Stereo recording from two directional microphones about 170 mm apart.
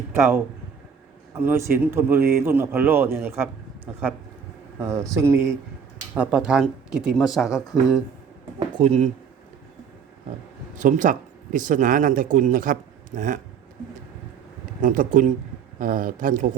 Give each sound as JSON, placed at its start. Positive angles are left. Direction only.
{"t": 0.2, "sound": "a man's voice", "side_deg": -10}
{"t": 4.8, "sound": "a man's voice", "side_deg": -15}
{"t": 8.8, "sound": "speech", "side_deg": -35}
{"t": 10.8, "sound": "speech", "side_deg": -50}
{"t": 14.8, "sound": "speech", "side_deg": -50}